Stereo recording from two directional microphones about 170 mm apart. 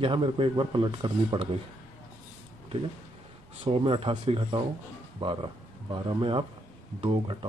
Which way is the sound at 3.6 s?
30° right (ahead or behind).